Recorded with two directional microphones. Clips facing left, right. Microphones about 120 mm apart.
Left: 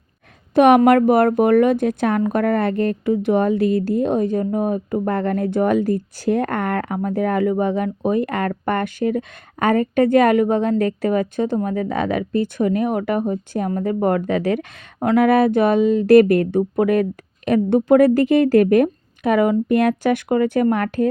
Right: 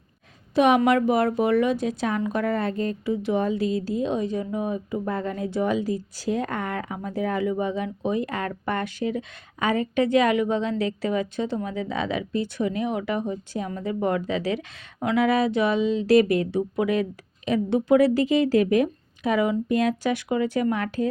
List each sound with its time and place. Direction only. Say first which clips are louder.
0.5 s speech: left 7 dB; 55° left (ahead or behind)